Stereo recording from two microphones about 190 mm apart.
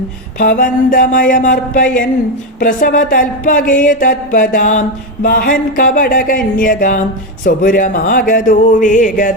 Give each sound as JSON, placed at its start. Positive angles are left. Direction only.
{"t": 0.3, "sound": "speech", "side_deg": 45}